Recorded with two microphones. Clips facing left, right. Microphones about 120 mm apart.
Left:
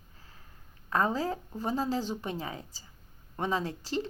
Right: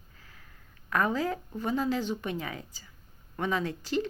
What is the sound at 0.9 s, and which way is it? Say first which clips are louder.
Speech: right 1 dB; 30° left (ahead or behind).